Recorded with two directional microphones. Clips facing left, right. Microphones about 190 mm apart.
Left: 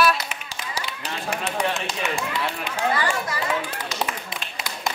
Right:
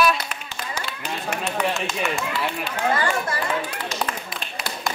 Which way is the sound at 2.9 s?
50° right (ahead or behind).